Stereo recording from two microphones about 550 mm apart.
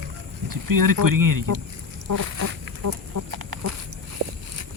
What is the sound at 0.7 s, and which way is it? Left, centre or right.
Speech, right.